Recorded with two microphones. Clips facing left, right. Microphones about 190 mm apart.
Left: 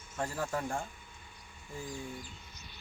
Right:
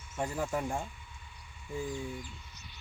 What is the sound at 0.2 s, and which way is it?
Speech, 20° right (ahead or behind).